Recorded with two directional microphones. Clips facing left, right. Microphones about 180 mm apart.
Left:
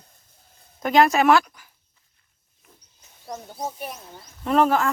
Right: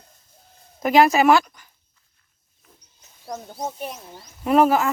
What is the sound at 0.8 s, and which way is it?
Speech, 5° right (ahead or behind).